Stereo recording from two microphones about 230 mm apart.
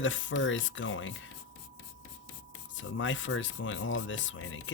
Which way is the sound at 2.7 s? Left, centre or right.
Left.